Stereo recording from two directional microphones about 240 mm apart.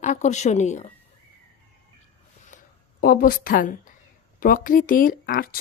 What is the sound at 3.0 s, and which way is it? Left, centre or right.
Speech, left.